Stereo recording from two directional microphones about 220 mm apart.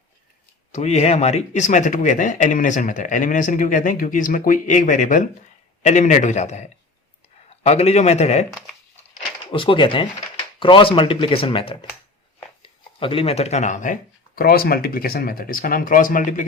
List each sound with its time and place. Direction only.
0.7 s speech: 30° left (ahead or behind)
9.5 s speech: 25° left (ahead or behind)